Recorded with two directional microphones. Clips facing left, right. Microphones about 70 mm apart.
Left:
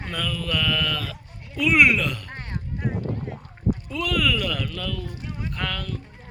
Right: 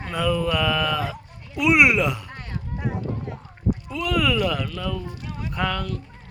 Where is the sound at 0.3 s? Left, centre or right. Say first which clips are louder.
Right 4 dB; centre.